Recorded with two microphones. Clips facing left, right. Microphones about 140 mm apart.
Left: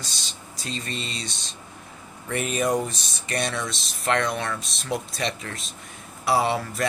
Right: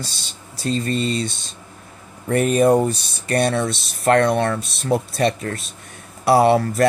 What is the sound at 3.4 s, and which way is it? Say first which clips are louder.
Speech: right 9 dB; 55° right (ahead or behind).